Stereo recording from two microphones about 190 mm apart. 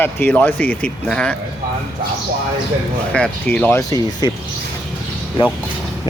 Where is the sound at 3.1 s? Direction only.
5° left (ahead or behind).